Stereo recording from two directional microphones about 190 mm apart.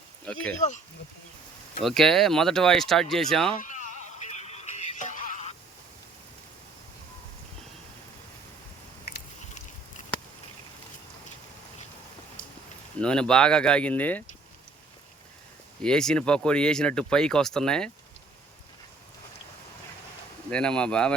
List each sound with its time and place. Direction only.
0.3 s speech: 5° left (ahead or behind)
1.8 s speech: 5° left (ahead or behind)
3.6 s synthetic singing: 40° left (ahead or behind)
13.0 s speech: 5° left (ahead or behind)
15.8 s speech: 5° left (ahead or behind)
20.5 s speech: 5° left (ahead or behind)